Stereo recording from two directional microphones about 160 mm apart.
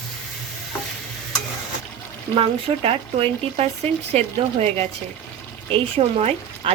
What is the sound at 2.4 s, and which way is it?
Speech, 35° right (ahead or behind).